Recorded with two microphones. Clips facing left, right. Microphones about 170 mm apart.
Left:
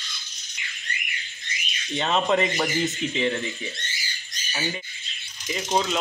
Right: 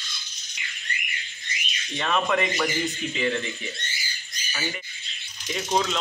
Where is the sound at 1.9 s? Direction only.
25° left (ahead or behind).